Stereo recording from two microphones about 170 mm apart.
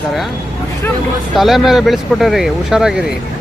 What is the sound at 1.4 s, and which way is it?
Speech, centre (ahead or behind).